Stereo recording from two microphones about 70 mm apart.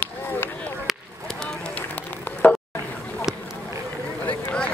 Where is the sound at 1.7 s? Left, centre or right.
Left.